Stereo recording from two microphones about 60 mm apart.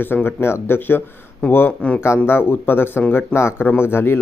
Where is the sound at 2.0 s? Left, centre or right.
Left.